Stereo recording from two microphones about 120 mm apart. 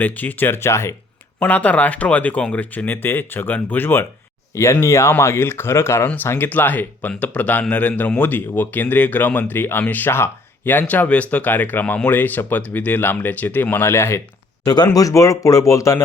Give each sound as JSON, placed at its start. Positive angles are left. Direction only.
{"t": 0.0, "sound": "speech", "side_deg": 15}
{"t": 14.6, "sound": "speech", "side_deg": 30}